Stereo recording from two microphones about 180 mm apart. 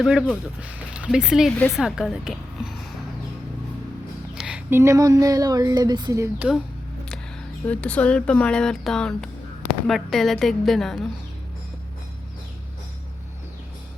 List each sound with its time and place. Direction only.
0.0 s a woman's voice: 5° right (ahead or behind)
4.4 s a sound: 5° right (ahead or behind)
4.8 s speech: 20° right (ahead or behind)
7.7 s speech: 5° left (ahead or behind)